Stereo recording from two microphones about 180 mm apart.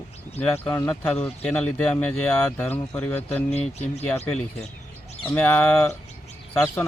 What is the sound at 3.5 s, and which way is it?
Speech, 35° left (ahead or behind).